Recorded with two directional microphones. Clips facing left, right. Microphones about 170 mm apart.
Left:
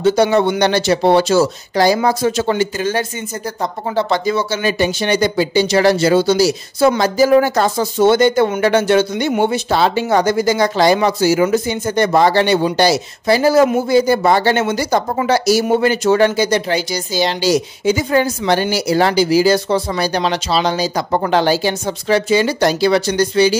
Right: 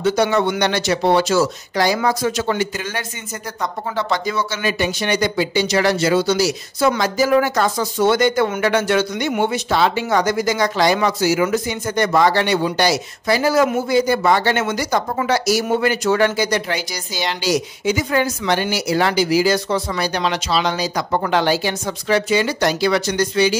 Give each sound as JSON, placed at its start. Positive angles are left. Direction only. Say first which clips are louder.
{"t": 0.0, "sound": "speech", "louder": "left 4 dB", "side_deg": 30}